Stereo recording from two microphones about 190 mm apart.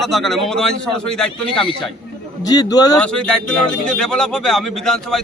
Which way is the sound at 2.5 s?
20° left (ahead or behind).